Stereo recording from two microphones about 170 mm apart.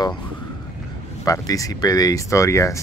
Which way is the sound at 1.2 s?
20° left (ahead or behind).